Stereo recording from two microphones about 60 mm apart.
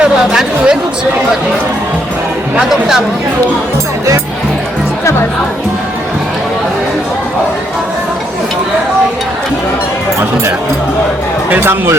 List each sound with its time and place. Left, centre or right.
0.0 s speech: centre
2.6 s speech: centre
11.5 s speech: right